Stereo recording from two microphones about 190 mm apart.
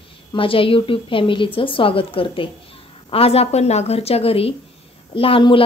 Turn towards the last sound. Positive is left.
turn(degrees=30)  # may be behind; listen again after turning